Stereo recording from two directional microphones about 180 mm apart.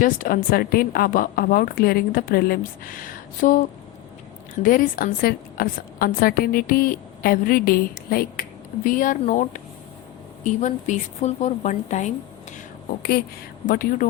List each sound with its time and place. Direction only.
0.0 s a woman's voice: 50° left (ahead or behind)
4.6 s a woman's voice: 50° left (ahead or behind)
13.0 s speech: 60° left (ahead or behind)
13.7 s a woman's voice: 50° left (ahead or behind)